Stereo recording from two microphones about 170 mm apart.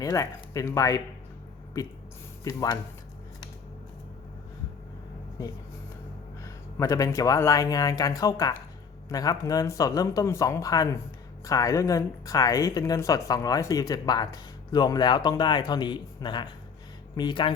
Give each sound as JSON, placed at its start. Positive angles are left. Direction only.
{"t": 0.0, "sound": "a woman's voice", "side_deg": 20}
{"t": 2.4, "sound": "speech", "side_deg": 20}
{"t": 5.4, "sound": "a woman's voice", "side_deg": 20}